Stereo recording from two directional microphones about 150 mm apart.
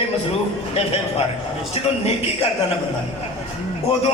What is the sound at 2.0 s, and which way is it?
Speech, 40° left (ahead or behind).